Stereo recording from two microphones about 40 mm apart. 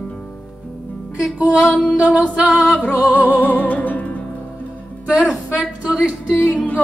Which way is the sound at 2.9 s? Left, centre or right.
Right.